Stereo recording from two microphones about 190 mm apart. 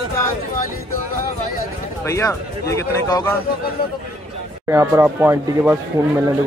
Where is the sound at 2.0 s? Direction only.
15° left (ahead or behind).